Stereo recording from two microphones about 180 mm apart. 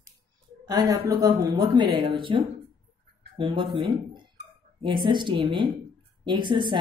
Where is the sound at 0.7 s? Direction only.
20° right (ahead or behind).